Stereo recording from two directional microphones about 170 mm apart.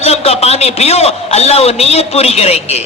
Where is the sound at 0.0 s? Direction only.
40° left (ahead or behind).